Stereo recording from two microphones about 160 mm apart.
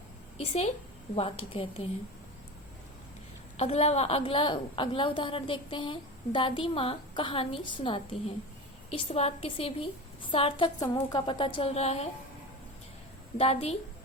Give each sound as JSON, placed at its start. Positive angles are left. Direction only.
{"t": 0.3, "sound": "a woman's voice", "side_deg": 40}
{"t": 3.6, "sound": "a woman's voice", "side_deg": 40}
{"t": 13.4, "sound": "a woman's voice", "side_deg": 40}